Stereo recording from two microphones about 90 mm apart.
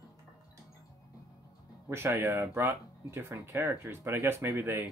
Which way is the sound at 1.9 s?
25° right (ahead or behind).